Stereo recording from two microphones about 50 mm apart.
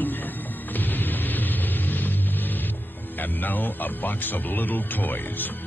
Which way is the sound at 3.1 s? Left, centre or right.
Left.